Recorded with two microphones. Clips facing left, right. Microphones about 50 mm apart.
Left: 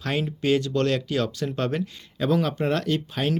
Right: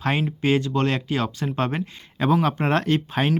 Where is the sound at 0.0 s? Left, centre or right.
Right.